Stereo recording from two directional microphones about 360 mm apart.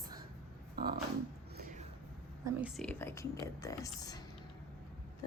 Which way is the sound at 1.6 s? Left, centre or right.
Right.